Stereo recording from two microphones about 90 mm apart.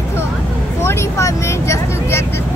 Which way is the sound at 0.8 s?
30° left (ahead or behind).